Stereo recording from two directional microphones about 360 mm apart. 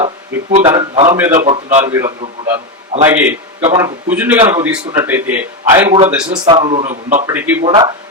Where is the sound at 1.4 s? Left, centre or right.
Centre.